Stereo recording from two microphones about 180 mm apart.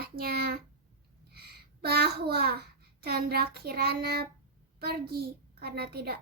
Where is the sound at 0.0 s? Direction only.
60° right (ahead or behind).